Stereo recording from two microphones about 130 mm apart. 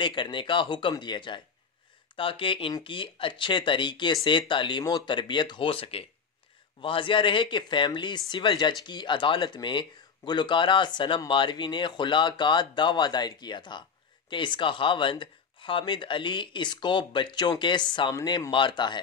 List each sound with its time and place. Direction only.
0.0 s speech: 40° left (ahead or behind)